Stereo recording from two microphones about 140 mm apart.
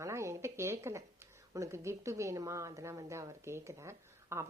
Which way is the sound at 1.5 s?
20° right (ahead or behind).